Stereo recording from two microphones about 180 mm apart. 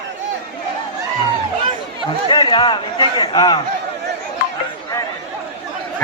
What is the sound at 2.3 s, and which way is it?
A man's voice, 25° left (ahead or behind).